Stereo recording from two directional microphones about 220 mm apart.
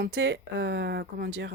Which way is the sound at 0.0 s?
55° right (ahead or behind).